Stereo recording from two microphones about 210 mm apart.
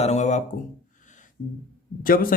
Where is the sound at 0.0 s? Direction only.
30° left (ahead or behind).